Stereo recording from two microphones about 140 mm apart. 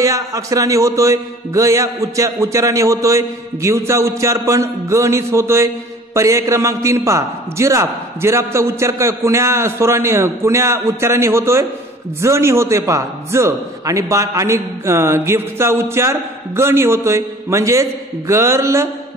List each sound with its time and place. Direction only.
0.0 s a man's voice: 25° right (ahead or behind)